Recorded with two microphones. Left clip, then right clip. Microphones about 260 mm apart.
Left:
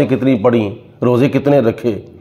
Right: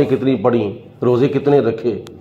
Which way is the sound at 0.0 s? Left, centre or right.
Left.